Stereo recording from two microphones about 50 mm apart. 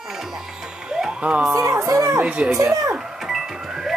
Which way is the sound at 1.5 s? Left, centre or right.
Right.